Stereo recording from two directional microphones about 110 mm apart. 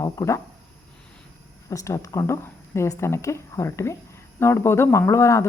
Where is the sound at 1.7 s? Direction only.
30° left (ahead or behind).